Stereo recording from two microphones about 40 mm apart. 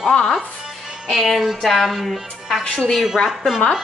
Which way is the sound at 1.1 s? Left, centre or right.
Centre.